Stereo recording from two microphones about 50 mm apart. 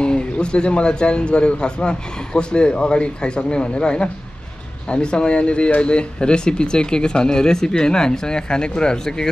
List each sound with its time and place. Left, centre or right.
0.0 s a man's voice: centre